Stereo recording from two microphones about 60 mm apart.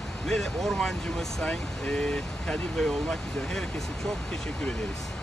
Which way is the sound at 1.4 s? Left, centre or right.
Centre.